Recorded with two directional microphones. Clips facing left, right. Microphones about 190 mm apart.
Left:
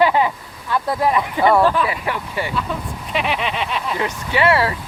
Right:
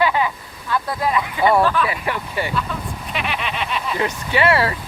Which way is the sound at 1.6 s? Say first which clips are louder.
Left 2 dB; 30° left (ahead or behind).